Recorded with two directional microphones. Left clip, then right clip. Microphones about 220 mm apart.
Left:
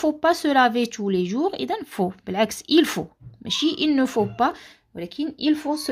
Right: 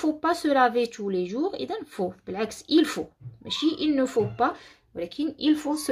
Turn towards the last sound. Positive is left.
turn(degrees=15)  # may be behind; listen again after turning